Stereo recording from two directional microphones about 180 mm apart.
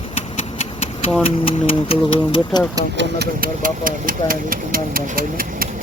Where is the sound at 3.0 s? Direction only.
70° right (ahead or behind).